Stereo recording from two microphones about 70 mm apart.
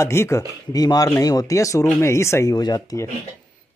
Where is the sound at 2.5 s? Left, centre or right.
Left.